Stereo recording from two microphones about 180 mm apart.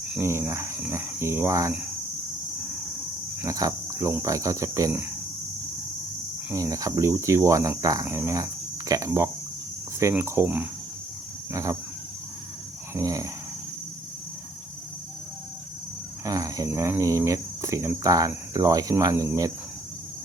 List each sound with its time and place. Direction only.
0.2 s cricket: 15° right (ahead or behind)
3.4 s cricket: 20° right (ahead or behind)
6.5 s cricket: 20° right (ahead or behind)
12.9 s a sound: 20° right (ahead or behind)
16.2 s cricket: 20° right (ahead or behind)